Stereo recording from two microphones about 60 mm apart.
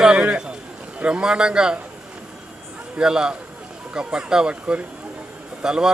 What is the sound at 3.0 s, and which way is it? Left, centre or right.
A man's voice, centre.